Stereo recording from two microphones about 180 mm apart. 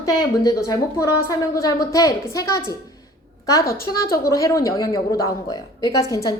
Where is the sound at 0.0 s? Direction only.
20° left (ahead or behind).